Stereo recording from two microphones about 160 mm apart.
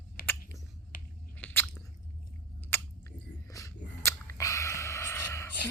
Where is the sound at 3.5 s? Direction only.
20° left (ahead or behind).